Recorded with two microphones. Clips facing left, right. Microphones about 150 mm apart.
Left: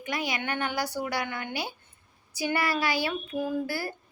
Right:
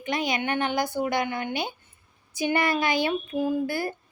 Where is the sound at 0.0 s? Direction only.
25° right (ahead or behind).